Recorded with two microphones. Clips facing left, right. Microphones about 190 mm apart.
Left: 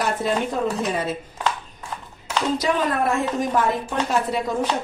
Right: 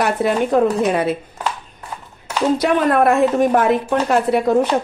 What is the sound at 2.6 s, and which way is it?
Speech, 65° right (ahead or behind).